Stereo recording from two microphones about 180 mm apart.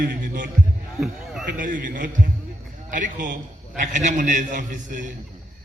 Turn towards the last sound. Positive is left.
turn(degrees=-45)  # may be behind; listen again after turning